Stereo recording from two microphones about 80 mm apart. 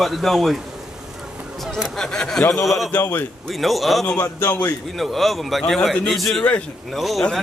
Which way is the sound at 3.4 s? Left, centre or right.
Centre.